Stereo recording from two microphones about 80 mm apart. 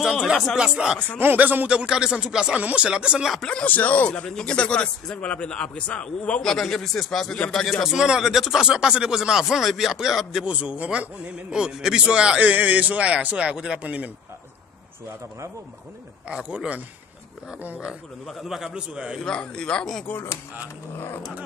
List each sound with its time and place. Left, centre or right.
0.3 s a man's voice: centre
1.2 s speech: right
3.4 s a man's voice: centre
7.3 s speech: centre
7.8 s speech: centre
16.3 s speech: centre
18.2 s a man's voice: centre
19.2 s speech: centre
20.1 s speech: left